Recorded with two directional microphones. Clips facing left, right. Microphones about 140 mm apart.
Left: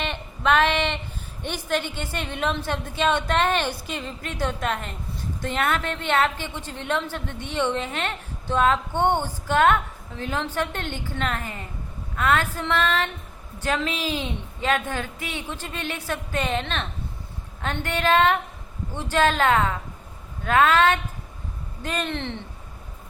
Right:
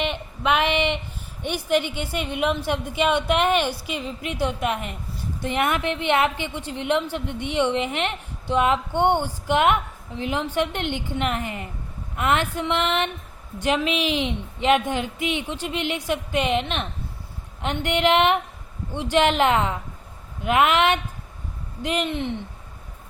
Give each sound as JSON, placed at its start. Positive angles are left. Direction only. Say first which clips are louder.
{"t": 0.0, "sound": "a sound", "louder": "right 1 dB", "side_deg": -15}
{"t": 1.4, "sound": "a woman's voice", "louder": "right 4 dB", "side_deg": -15}
{"t": 12.1, "sound": "female singing", "louder": "even", "side_deg": -20}
{"t": 13.6, "sound": "a woman's voice", "louder": "right 4 dB", "side_deg": -15}
{"t": 19.1, "sound": "female singing", "louder": "right 1 dB", "side_deg": -20}
{"t": 20.4, "sound": "a woman's voice", "louder": "even", "side_deg": -15}